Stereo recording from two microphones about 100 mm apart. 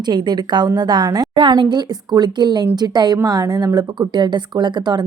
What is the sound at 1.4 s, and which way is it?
A woman's voice, 50° right (ahead or behind).